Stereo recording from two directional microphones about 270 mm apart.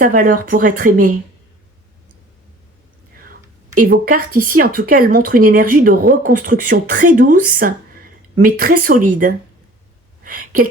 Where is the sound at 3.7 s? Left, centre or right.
Right.